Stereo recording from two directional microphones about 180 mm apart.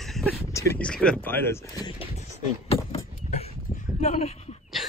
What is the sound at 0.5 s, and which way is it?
Speech, 15° left (ahead or behind).